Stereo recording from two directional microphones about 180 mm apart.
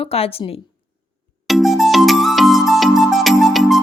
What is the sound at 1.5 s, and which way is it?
Music, centre (ahead or behind).